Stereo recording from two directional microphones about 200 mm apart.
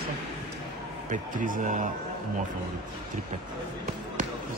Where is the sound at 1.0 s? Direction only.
40° right (ahead or behind).